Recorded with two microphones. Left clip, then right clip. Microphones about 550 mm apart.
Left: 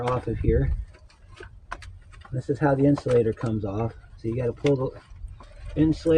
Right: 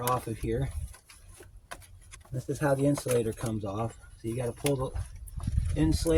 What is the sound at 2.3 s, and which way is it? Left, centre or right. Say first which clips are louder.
Speech: left 5 dB; right.